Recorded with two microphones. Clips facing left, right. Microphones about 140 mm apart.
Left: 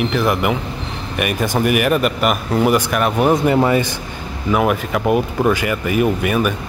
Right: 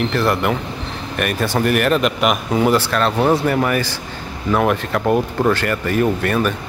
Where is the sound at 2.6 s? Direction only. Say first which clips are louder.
Even; 15° left (ahead or behind).